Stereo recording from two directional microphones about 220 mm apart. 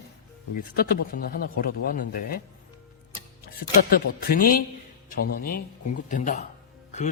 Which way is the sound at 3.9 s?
40° left (ahead or behind).